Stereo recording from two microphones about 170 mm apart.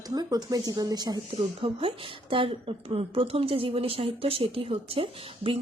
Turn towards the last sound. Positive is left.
turn(degrees=-30)  # may be behind; listen again after turning